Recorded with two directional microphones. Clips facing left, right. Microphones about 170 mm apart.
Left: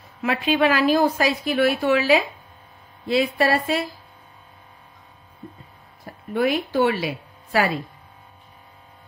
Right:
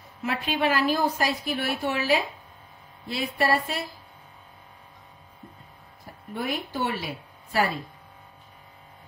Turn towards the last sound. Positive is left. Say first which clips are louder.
# left 4 dB
turn(degrees=85)